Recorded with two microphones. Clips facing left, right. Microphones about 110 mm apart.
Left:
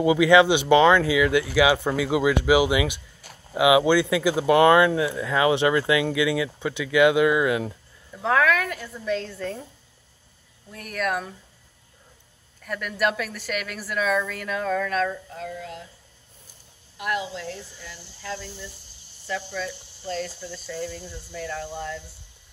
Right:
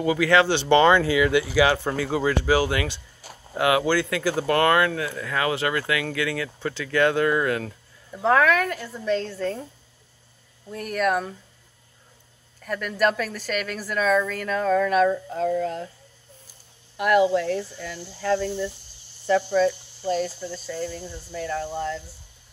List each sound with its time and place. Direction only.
0.0 s speech: 15° left (ahead or behind)
0.7 s a woman's voice: centre (ahead or behind)
8.2 s a woman's voice: centre (ahead or behind)
10.7 s a woman's voice: 5° right (ahead or behind)
12.6 s a woman's voice: centre (ahead or behind)
15.0 s speech: 35° right (ahead or behind)
15.5 s speech: 45° right (ahead or behind)
16.9 s speech: 60° right (ahead or behind)
19.2 s speech: 45° right (ahead or behind)
20.1 s a woman's voice: 10° right (ahead or behind)